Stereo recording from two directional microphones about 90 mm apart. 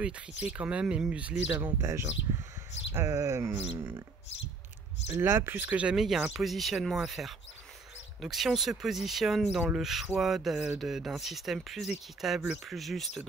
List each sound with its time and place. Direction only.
0.0 s speech: 15° right (ahead or behind)
1.8 s speech: 30° right (ahead or behind)
5.2 s speech: 25° right (ahead or behind)
5.9 s speech: 5° right (ahead or behind)